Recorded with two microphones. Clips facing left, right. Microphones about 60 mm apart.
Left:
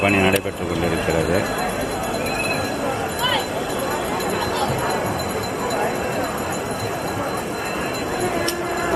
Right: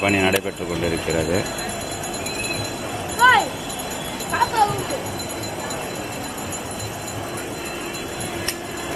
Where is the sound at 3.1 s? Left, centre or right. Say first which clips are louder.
Right 12 dB; right.